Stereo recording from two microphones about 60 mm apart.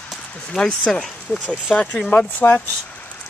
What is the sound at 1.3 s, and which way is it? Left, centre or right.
Speech, left.